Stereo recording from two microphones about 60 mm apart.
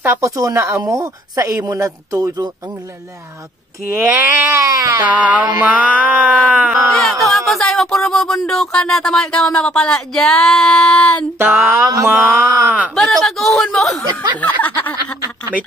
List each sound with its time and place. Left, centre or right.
0.2 s speech: right
3.9 s a sound: right
4.5 s speech: right
5.0 s music: right
6.9 s speech: centre
11.0 s a sound: left
11.3 s a sound: right
12.4 s speech: right
12.9 s speech: centre
14.4 s snicker: left